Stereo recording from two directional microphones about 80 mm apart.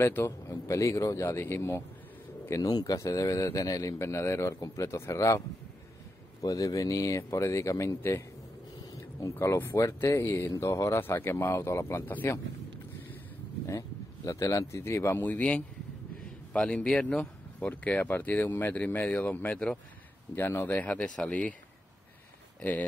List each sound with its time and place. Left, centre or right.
0.0 s speech: left
2.5 s speech: left
6.4 s speech: left
9.3 s speech: left
13.7 s a man's voice: left; by 19.8 s centre
20.3 s speech: left
22.6 s speech: left